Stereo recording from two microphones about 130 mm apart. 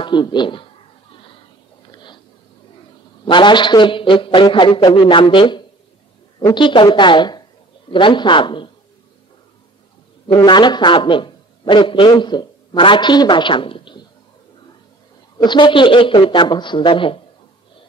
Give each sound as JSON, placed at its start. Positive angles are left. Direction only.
{"t": 0.0, "sound": "a man's voice", "side_deg": 35}
{"t": 3.3, "sound": "a man's voice", "side_deg": 35}
{"t": 10.2, "sound": "a man's voice", "side_deg": 35}
{"t": 15.3, "sound": "a man's voice", "side_deg": 35}